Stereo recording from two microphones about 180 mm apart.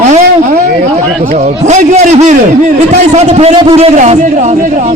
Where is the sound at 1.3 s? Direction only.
40° right (ahead or behind).